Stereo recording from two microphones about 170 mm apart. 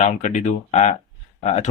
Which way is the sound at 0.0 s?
45° left (ahead or behind).